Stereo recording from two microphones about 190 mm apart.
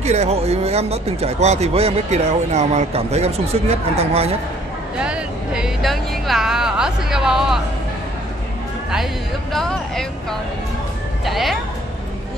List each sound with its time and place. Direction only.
0.0 s speech: 35° right (ahead or behind)
5.0 s speech: 5° right (ahead or behind)
9.5 s speech: centre (ahead or behind)
11.2 s speech: centre (ahead or behind)